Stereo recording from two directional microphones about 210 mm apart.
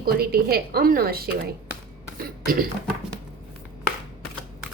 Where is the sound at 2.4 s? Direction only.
45° right (ahead or behind).